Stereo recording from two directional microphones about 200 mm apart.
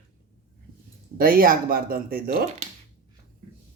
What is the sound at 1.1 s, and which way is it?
Speech, 45° right (ahead or behind).